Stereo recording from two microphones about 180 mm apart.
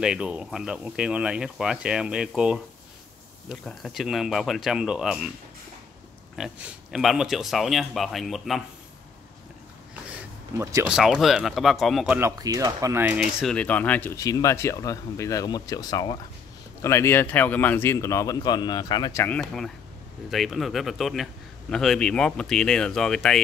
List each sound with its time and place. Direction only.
0.0 s a man's voice: 5° right (ahead or behind)
6.3 s a man's voice: 5° right (ahead or behind)
10.1 s a sound: 15° right (ahead or behind)
10.9 s a man's voice: 5° right (ahead or behind)
12.2 s speech: 15° right (ahead or behind); by 19.2 s 25° left (ahead or behind)
19.2 s a man's voice: 5° left (ahead or behind)